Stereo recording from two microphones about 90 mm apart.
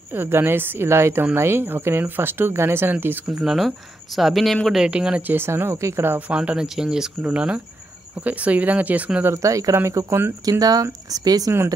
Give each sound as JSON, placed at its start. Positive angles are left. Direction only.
{"t": 0.1, "sound": "speech", "side_deg": -25}
{"t": 3.3, "sound": "speech", "side_deg": -5}
{"t": 9.3, "sound": "speech", "side_deg": -35}
{"t": 10.4, "sound": "speech", "side_deg": -45}